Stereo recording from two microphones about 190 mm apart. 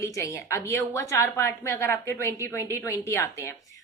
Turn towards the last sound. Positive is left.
turn(degrees=15)  # may be behind; listen again after turning